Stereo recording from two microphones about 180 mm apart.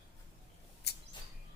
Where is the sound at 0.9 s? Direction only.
65° left (ahead or behind).